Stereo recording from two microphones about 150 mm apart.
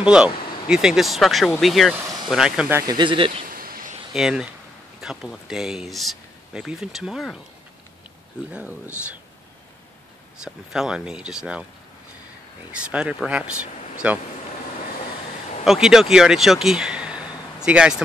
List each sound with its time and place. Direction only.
0.0 s speech: 5° right (ahead or behind)
2.7 s speech: 30° right (ahead or behind)
3.4 s a sound: 75° right (ahead or behind)
4.1 s speech: 5° right (ahead or behind)
8.5 s speech: 10° right (ahead or behind)
10.4 s speech: 5° right (ahead or behind)
12.7 s speech: 5° right (ahead or behind)
15.6 s speech: 5° right (ahead or behind)